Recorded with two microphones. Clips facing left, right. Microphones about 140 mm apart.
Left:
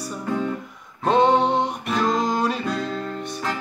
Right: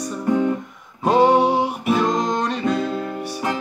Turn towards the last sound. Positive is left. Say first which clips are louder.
# right 3 dB
turn(degrees=-10)  # may be behind; listen again after turning